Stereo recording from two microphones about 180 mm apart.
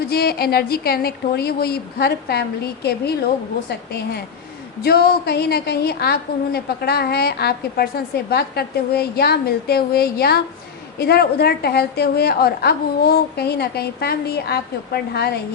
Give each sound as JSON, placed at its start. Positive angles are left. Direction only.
{"t": 0.1, "sound": "a woman's voice", "side_deg": 60}